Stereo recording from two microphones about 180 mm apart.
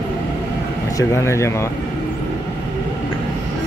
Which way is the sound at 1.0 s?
15° left (ahead or behind).